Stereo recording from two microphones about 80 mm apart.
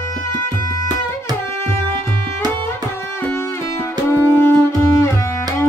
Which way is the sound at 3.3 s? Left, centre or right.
Left.